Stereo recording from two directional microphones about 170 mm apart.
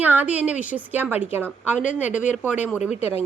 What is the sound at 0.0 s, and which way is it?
A woman's voice, 10° right (ahead or behind).